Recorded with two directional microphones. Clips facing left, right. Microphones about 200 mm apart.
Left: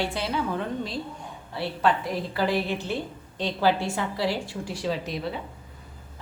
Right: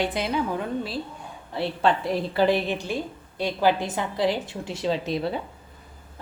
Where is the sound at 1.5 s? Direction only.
25° right (ahead or behind).